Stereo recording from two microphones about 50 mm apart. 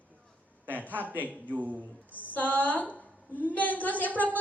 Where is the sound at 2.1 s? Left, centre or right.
Left.